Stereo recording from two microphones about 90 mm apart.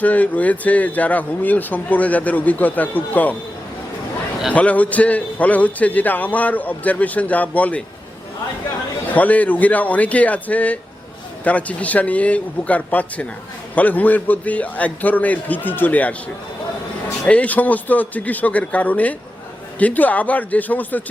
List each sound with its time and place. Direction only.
0.0 s speech: 15° left (ahead or behind)
4.5 s speech: 15° left (ahead or behind)
9.1 s speech: 15° left (ahead or behind)
17.2 s speech: 15° left (ahead or behind)